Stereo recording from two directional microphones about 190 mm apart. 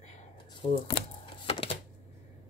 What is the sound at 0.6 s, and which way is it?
Speech, 25° left (ahead or behind).